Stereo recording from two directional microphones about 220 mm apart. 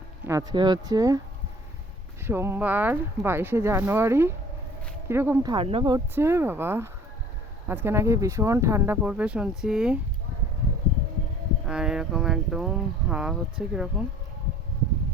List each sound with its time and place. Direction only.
0.3 s speech: 15° right (ahead or behind)
2.2 s speech: 10° right (ahead or behind)
11.6 s speech: 5° right (ahead or behind)